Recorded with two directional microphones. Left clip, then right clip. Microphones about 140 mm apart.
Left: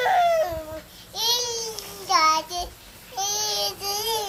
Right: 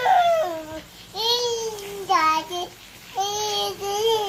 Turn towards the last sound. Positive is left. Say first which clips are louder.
# right 5 dB
turn(degrees=10)  # may be behind; listen again after turning